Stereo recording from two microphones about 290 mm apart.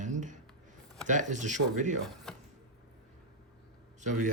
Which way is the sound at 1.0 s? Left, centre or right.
Right.